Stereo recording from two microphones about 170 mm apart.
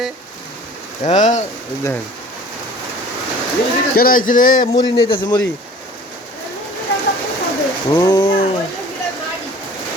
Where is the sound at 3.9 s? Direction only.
55° left (ahead or behind).